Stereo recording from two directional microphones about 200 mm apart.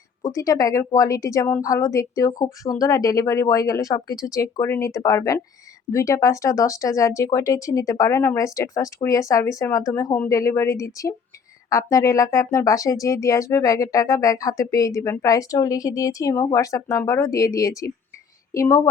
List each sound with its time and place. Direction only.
0.2 s speech: 15° left (ahead or behind)